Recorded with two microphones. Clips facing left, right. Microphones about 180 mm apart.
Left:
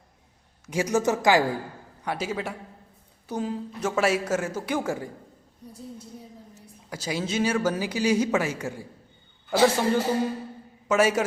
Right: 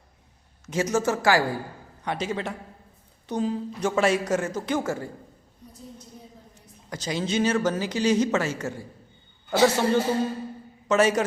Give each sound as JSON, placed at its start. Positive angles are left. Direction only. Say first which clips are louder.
{"t": 0.6, "sound": "speech", "louder": "even", "side_deg": 10}
{"t": 2.0, "sound": "speech", "louder": "right 1 dB", "side_deg": 5}
{"t": 6.5, "sound": "a man's voice", "louder": "right 3 dB", "side_deg": 5}